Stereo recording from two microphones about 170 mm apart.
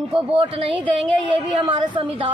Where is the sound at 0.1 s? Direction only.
35° right (ahead or behind).